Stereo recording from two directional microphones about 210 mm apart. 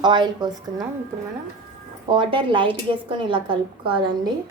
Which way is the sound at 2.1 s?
25° right (ahead or behind).